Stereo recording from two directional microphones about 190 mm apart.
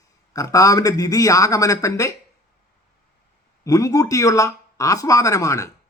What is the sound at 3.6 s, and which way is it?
Speech, 15° left (ahead or behind).